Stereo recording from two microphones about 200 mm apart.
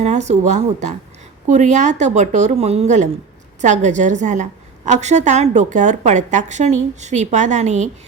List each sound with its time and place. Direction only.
0.0 s a woman's voice: 35° right (ahead or behind)